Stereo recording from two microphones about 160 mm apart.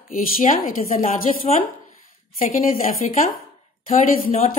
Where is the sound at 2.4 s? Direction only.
60° left (ahead or behind).